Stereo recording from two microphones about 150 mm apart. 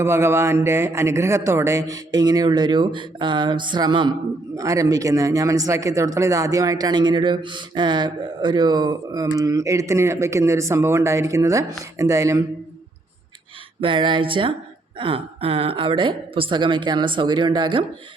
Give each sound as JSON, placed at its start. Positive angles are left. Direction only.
{"t": 0.0, "sound": "speech", "side_deg": -15}
{"t": 13.8, "sound": "a woman's voice", "side_deg": -35}